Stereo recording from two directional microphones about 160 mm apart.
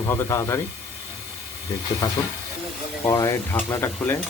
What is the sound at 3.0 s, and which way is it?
Speech, 25° left (ahead or behind).